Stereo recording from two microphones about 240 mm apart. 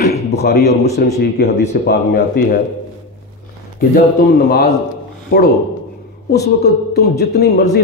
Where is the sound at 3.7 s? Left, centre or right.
Left.